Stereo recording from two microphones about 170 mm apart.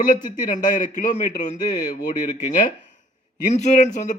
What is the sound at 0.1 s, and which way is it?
A man's voice, 50° left (ahead or behind).